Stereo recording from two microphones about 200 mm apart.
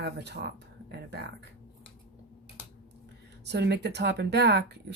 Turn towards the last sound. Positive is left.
turn(degrees=-55)  # may be behind; listen again after turning